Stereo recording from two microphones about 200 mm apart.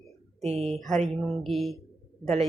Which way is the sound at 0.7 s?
Centre (ahead or behind).